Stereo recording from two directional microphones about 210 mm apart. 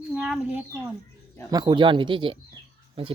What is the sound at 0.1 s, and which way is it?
Speech, 5° right (ahead or behind).